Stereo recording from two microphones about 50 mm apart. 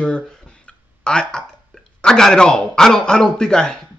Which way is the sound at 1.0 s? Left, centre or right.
Centre.